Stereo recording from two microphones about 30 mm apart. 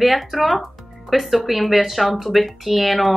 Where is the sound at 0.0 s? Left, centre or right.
Centre.